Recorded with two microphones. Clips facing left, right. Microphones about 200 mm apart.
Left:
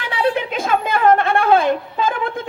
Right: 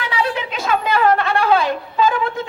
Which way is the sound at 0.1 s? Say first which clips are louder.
Left 5 dB; 50° left (ahead or behind).